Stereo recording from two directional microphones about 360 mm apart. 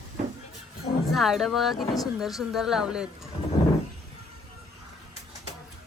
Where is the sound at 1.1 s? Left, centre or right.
Centre.